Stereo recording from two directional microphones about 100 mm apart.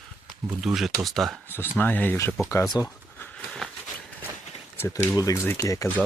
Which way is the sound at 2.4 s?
30° left (ahead or behind).